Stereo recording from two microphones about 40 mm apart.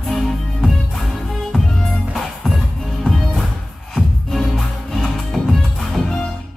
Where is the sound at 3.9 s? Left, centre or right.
Centre.